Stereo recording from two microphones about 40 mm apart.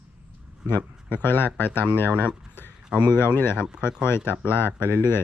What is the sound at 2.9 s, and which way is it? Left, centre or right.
Speech, right.